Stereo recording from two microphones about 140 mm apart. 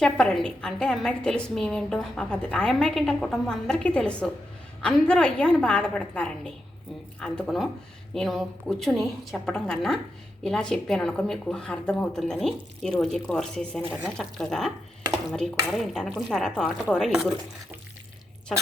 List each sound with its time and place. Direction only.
0.0 s a woman's voice: 5° left (ahead or behind)